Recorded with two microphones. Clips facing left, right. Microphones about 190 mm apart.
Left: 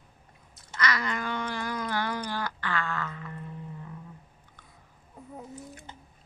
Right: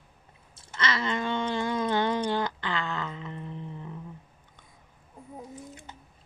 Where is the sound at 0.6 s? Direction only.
25° right (ahead or behind).